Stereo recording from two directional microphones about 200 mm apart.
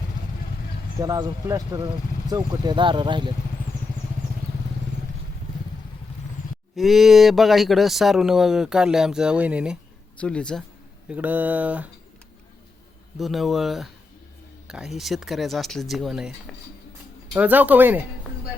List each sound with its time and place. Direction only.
0.9 s speech: 20° right (ahead or behind)
6.7 s speech: centre (ahead or behind)
10.2 s speech: 5° left (ahead or behind)
11.1 s speech: 10° right (ahead or behind)
13.1 s speech: centre (ahead or behind)
17.3 s speech: 10° right (ahead or behind)